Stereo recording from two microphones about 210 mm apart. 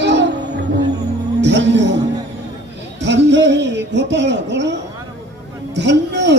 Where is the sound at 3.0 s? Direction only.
55° right (ahead or behind).